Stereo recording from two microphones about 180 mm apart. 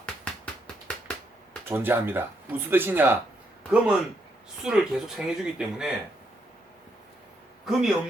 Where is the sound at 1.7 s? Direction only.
10° right (ahead or behind).